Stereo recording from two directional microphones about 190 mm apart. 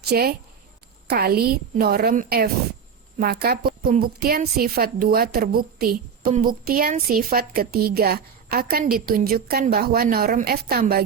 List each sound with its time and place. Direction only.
0.0 s a woman's voice: 55° right (ahead or behind)